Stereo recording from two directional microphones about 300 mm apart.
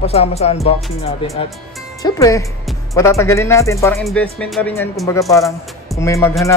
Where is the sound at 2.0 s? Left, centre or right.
Centre.